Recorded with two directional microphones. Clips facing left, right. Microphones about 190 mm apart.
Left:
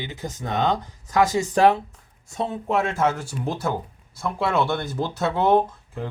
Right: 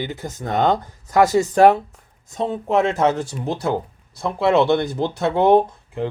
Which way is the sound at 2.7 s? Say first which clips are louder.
Right 5 dB; 20° right (ahead or behind).